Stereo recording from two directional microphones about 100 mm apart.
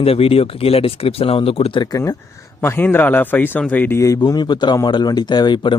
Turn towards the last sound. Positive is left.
turn(degrees=50)  # may be behind; listen again after turning